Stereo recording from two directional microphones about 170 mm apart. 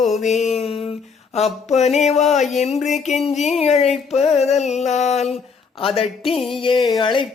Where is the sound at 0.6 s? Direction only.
35° left (ahead or behind).